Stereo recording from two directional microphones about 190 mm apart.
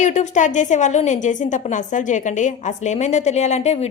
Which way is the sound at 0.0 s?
40° left (ahead or behind).